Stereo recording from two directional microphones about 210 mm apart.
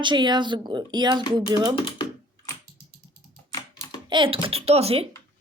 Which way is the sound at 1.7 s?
25° left (ahead or behind).